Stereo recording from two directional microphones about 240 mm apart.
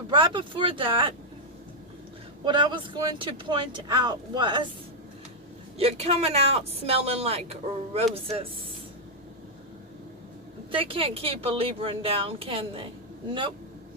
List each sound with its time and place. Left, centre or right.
0.1 s speech: right
2.4 s speech: centre
5.7 s speech: right
10.7 s speech: right